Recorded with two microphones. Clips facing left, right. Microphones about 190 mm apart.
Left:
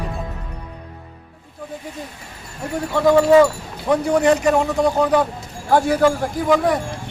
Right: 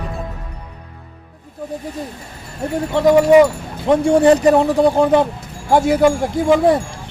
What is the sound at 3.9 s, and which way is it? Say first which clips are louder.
A man's voice: right 4 dB; 30° right (ahead or behind).